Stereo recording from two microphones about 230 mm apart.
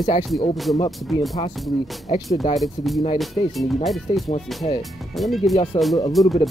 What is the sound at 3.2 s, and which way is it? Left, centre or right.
Speech, centre.